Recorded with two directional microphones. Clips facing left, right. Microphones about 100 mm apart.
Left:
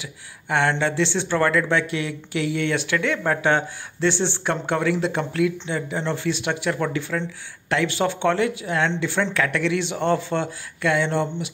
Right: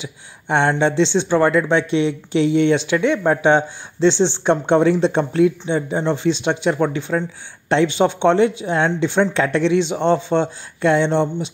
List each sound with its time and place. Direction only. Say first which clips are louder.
0.0 s speech: right 5 dB; 25° right (ahead or behind)